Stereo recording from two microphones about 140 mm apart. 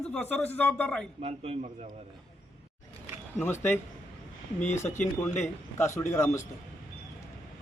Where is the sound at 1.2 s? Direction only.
45° right (ahead or behind).